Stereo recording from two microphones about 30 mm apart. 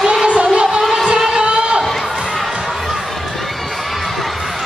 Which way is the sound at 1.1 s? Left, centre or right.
Centre.